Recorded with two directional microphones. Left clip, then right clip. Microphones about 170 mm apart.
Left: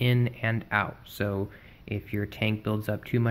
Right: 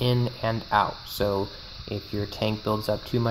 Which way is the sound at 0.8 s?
10° left (ahead or behind).